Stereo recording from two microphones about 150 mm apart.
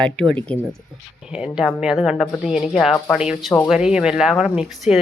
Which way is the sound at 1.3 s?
5° right (ahead or behind).